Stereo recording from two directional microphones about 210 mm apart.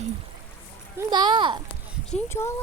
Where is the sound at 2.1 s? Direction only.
10° left (ahead or behind).